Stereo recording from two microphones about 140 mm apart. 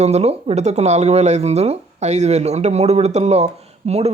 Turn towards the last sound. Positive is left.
turn(degrees=-50)  # may be behind; listen again after turning